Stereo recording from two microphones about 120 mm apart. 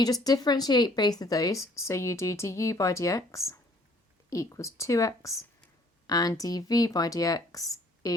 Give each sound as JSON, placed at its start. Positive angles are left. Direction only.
{"t": 0.0, "sound": "speech", "side_deg": 30}